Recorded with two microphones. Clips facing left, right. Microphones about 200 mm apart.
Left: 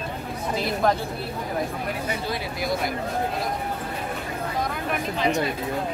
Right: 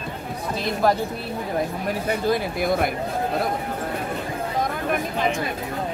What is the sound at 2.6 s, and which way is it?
Speech, 55° right (ahead or behind).